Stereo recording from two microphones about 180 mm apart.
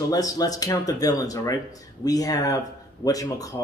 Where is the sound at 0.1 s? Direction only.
20° left (ahead or behind).